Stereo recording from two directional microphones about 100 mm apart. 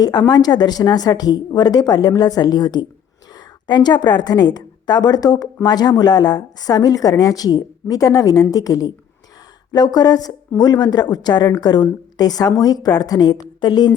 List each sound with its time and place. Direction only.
0.0 s a woman's voice: 40° left (ahead or behind)